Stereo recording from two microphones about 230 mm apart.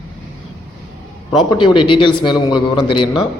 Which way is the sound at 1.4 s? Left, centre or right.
Left.